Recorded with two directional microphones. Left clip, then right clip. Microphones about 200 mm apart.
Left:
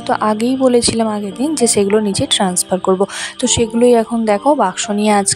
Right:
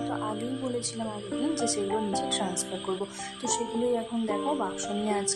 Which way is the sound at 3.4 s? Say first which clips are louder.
Left 16 dB; 45° left (ahead or behind).